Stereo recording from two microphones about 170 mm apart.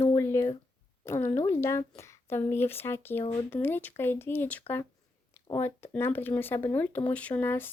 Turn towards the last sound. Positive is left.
turn(degrees=10)  # may be behind; listen again after turning